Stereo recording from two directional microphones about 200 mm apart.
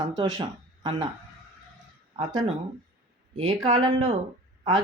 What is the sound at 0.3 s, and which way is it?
Speech, 25° right (ahead or behind).